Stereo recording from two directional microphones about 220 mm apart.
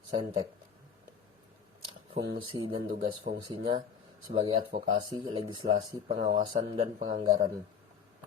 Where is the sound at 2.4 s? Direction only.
25° right (ahead or behind).